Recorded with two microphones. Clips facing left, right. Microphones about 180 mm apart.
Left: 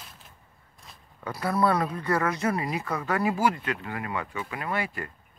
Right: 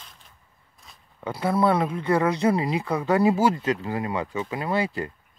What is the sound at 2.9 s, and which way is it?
Speech, 15° right (ahead or behind).